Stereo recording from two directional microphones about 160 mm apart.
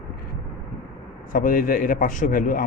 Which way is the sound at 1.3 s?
55° left (ahead or behind).